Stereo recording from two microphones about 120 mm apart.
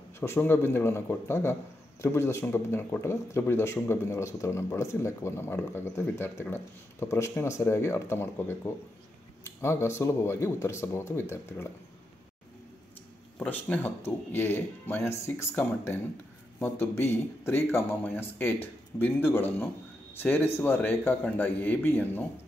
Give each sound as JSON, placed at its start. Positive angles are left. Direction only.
{"t": 0.2, "sound": "speech", "side_deg": 20}
{"t": 13.4, "sound": "speech", "side_deg": 15}